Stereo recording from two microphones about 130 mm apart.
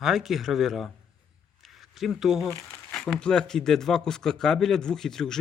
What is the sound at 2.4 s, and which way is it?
Speech, 20° left (ahead or behind).